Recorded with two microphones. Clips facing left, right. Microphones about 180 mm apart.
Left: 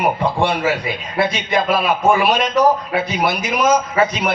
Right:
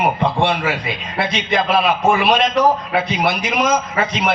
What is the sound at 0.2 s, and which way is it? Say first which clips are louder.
A man's voice: even; 65° right (ahead or behind).